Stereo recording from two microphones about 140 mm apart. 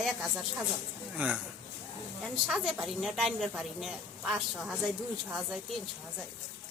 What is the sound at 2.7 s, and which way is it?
A woman's voice, 5° right (ahead or behind).